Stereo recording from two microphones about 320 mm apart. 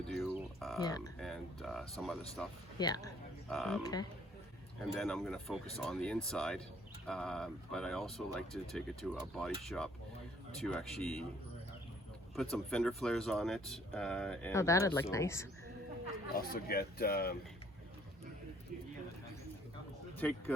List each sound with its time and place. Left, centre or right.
0.1 s a sound: centre
0.8 s speech: centre
1.2 s a sound: centre
2.4 s speech: centre
2.7 s speech: centre
3.5 s speech: centre
4.8 s speech: centre
12.4 s speech: centre
16.3 s speech: left
20.2 s speech: centre